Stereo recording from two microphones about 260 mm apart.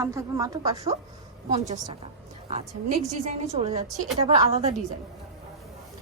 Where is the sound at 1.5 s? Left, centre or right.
Right.